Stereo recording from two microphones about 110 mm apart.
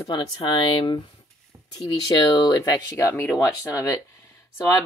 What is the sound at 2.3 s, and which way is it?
Speech, 35° left (ahead or behind).